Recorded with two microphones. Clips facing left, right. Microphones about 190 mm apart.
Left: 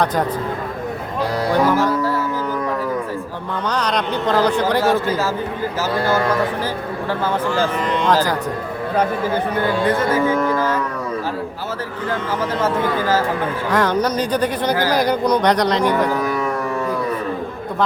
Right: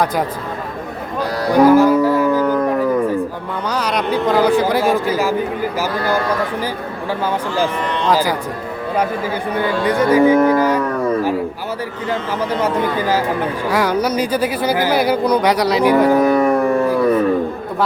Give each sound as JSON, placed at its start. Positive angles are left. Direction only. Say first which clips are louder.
{"t": 1.5, "sound": "music", "louder": "right 8 dB", "side_deg": -15}
{"t": 3.7, "sound": "speech", "louder": "right 2 dB", "side_deg": -10}
{"t": 8.1, "sound": "speech", "louder": "right 2 dB", "side_deg": -10}
{"t": 9.8, "sound": "speech", "louder": "right 8 dB", "side_deg": -15}
{"t": 12.6, "sound": "speech", "louder": "even", "side_deg": -15}
{"t": 16.2, "sound": "music", "louder": "right 8 dB", "side_deg": -55}